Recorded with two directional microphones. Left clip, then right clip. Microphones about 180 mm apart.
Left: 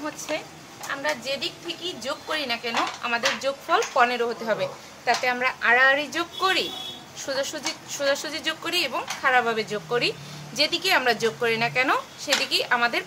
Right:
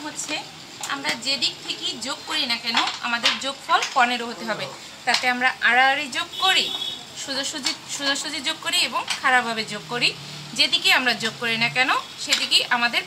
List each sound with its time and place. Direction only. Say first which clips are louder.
1.0 s a woman's voice: right 3 dB; 40° left (ahead or behind); by 6.6 s 55° left (ahead or behind)
8.3 s speech: right 2 dB; 60° left (ahead or behind)